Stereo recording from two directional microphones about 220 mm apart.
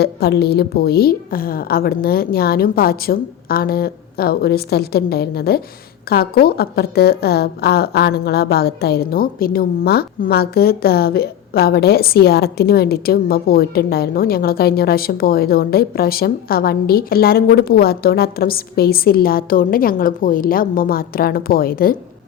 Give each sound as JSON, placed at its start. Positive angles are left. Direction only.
{"t": 0.0, "sound": "a woman's voice", "side_deg": 45}